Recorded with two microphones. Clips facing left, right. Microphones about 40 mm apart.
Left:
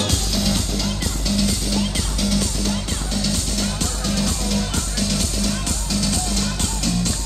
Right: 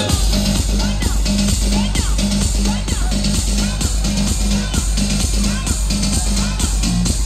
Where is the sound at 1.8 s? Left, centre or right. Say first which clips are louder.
Right 2 dB; right.